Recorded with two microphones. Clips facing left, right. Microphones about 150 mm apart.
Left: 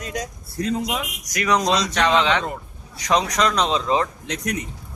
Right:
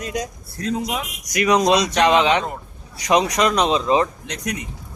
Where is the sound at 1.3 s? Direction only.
15° right (ahead or behind).